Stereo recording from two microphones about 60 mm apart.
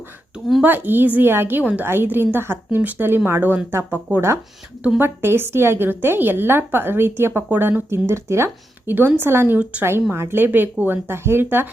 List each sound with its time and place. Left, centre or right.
0.6 s a woman's voice: right
7.9 s speech: right
8.9 s a woman's voice: right